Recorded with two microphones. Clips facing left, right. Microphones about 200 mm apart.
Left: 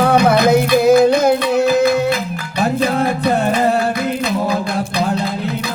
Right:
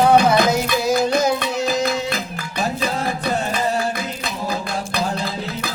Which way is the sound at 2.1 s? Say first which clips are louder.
Left 5 dB; 60° left (ahead or behind).